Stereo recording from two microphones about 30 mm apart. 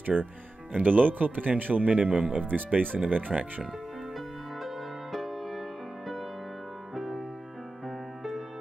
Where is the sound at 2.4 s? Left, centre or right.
Right.